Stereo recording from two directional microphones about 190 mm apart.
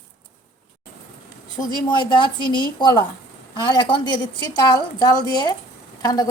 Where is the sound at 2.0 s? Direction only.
25° left (ahead or behind).